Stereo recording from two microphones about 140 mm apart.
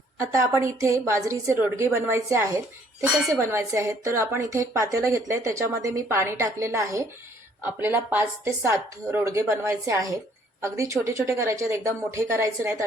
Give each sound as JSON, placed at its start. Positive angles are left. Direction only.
{"t": 0.2, "sound": "a woman's voice", "side_deg": -20}